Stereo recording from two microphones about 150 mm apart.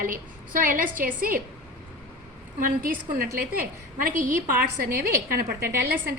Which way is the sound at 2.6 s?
70° right (ahead or behind).